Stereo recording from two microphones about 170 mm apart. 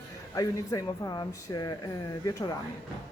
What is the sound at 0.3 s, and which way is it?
A man's voice, 20° left (ahead or behind).